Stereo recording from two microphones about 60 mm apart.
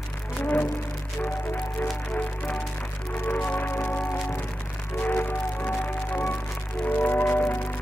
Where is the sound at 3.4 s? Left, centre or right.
Left.